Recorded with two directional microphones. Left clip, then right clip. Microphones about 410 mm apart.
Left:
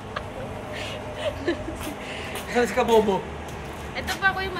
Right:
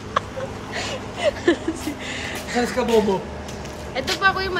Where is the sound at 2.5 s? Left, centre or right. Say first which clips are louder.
Even; centre.